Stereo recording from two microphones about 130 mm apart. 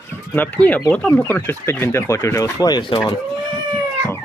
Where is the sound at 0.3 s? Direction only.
10° left (ahead or behind); by 3.1 s 35° left (ahead or behind).